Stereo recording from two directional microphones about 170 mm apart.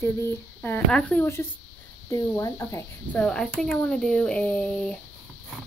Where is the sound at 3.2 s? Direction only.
5° left (ahead or behind).